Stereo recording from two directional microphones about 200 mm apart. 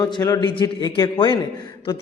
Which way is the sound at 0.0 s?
20° left (ahead or behind).